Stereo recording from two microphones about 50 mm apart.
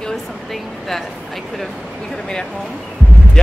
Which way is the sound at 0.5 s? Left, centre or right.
Centre.